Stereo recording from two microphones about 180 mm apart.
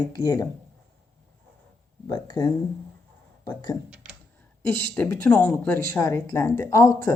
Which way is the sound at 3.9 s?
5° right (ahead or behind).